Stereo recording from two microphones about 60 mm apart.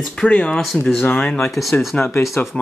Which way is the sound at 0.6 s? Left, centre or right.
Centre.